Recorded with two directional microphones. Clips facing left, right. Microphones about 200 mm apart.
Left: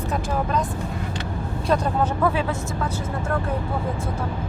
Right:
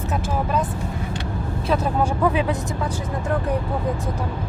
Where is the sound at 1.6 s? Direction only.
5° right (ahead or behind).